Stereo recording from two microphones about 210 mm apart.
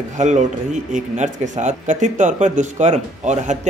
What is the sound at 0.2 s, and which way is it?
Speech, 35° right (ahead or behind).